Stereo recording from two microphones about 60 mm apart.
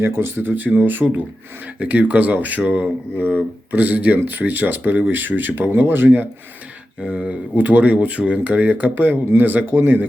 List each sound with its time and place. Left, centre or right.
0.0 s speech: right
7.0 s speech: centre